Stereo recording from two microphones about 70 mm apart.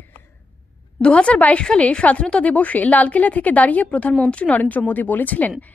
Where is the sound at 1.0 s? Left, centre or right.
Centre.